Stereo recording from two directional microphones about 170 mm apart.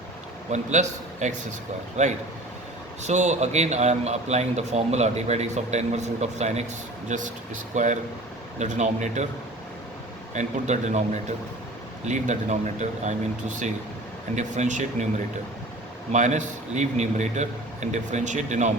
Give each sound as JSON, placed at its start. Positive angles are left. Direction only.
{"t": 0.5, "sound": "a man's voice", "side_deg": -45}
{"t": 10.3, "sound": "a man's voice", "side_deg": -45}
{"t": 14.3, "sound": "a man's voice", "side_deg": -45}
{"t": 16.1, "sound": "a man's voice", "side_deg": -45}